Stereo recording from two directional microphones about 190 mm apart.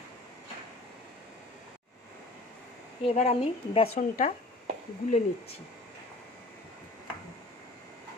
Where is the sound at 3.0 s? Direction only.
35° left (ahead or behind).